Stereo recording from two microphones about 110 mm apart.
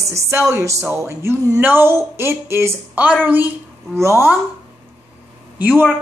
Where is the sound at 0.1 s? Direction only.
25° right (ahead or behind).